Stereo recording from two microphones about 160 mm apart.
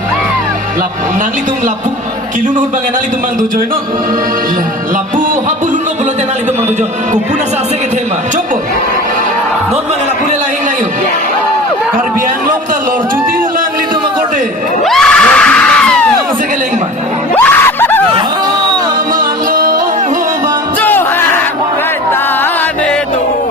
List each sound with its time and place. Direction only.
14.8 s screaming: 5° left (ahead or behind)
17.3 s screaming: 10° left (ahead or behind)
19.1 s music: 65° right (ahead or behind)
20.8 s music: 15° left (ahead or behind)